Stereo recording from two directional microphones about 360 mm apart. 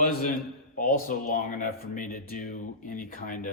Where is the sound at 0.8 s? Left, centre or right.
Left.